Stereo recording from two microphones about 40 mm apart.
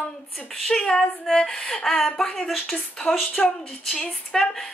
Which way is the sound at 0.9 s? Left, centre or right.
Centre.